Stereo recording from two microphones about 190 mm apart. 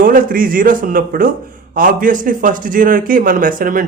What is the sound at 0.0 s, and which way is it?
A man's voice, 45° right (ahead or behind).